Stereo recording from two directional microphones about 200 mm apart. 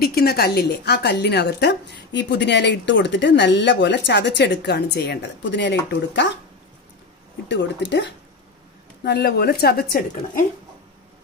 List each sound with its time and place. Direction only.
0.0 s a woman's voice: 50° left (ahead or behind)
7.4 s a woman's voice: 60° left (ahead or behind)